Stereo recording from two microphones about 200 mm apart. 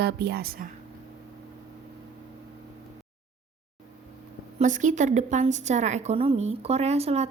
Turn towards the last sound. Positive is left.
turn(degrees=-30)  # may be behind; listen again after turning